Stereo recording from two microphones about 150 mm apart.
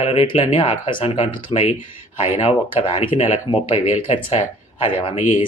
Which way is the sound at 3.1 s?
50° left (ahead or behind).